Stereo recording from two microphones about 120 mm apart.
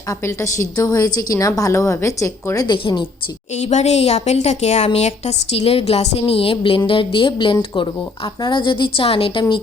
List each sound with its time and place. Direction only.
0.1 s a woman's voice: 25° left (ahead or behind)
2.6 s a woman's voice: 40° left (ahead or behind)
3.6 s a woman's voice: 70° left (ahead or behind); by 9.4 s 50° left (ahead or behind)